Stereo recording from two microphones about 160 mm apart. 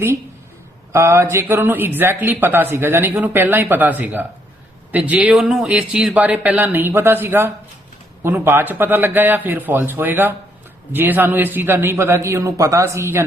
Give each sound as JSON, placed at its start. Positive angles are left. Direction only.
{"t": 0.9, "sound": "speech", "side_deg": -15}